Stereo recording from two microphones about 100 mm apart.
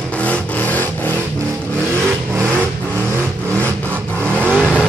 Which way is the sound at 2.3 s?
25° right (ahead or behind).